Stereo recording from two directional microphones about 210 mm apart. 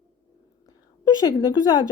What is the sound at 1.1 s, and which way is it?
Speech, 20° left (ahead or behind).